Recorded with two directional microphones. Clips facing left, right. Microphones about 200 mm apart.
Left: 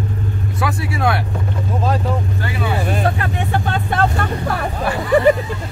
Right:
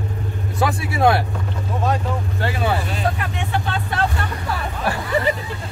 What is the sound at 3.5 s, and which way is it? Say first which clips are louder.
Speech: left 3 dB; 50° left (ahead or behind).